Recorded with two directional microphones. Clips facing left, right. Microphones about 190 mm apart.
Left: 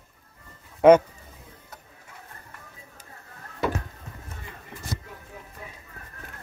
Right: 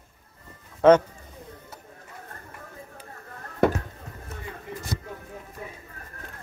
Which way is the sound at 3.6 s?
55° right (ahead or behind).